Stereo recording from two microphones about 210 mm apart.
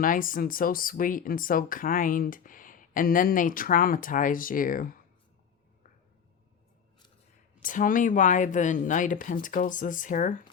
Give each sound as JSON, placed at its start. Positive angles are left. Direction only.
{"t": 0.0, "sound": "speech", "side_deg": 40}
{"t": 7.6, "sound": "speech", "side_deg": 40}